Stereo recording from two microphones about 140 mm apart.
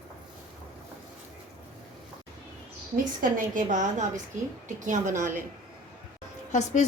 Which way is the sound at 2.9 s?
75° right (ahead or behind).